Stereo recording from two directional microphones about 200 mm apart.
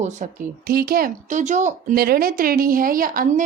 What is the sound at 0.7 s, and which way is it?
Speech, 50° right (ahead or behind).